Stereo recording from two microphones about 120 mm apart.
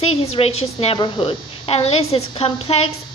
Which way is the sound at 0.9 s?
45° left (ahead or behind).